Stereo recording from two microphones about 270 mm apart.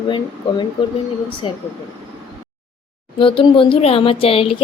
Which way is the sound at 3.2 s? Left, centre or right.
Centre.